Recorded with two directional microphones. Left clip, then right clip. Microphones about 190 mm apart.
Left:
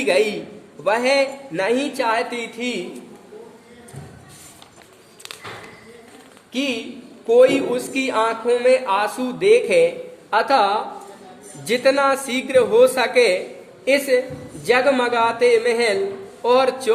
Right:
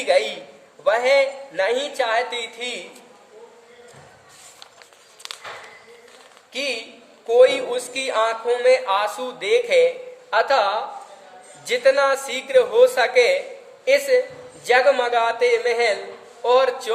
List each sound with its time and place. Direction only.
0.0 s music: 25° left (ahead or behind)
6.5 s a man's voice: 15° left (ahead or behind)
7.3 s music: 15° left (ahead or behind)